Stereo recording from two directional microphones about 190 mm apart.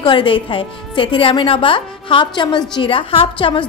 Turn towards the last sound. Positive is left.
turn(degrees=25)  # may be behind; listen again after turning